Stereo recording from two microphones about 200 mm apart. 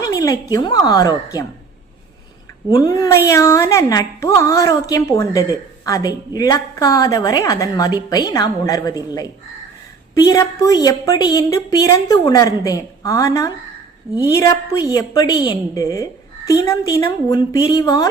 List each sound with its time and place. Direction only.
0.0 s speech: 15° left (ahead or behind)
2.6 s speech: 20° left (ahead or behind)
10.2 s speech: 15° left (ahead or behind)